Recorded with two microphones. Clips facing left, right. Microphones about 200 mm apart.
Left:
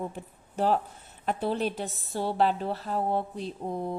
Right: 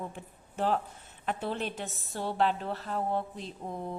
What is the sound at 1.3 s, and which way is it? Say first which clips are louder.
Speech: left 5 dB; 35° left (ahead or behind).